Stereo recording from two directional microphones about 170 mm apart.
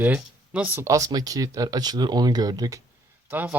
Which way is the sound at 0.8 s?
20° right (ahead or behind).